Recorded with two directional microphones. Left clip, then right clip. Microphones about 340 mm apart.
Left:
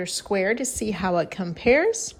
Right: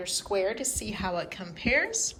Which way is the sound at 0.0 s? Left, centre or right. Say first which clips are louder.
Left 4 dB; left.